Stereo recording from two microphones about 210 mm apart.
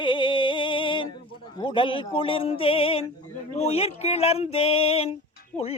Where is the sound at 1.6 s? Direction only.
25° left (ahead or behind).